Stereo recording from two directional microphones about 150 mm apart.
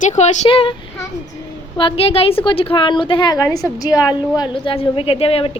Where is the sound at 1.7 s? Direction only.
35° left (ahead or behind).